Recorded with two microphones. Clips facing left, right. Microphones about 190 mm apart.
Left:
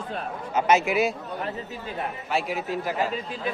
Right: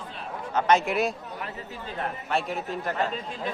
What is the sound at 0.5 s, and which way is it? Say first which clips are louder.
Speech: left 1 dB; 5° left (ahead or behind).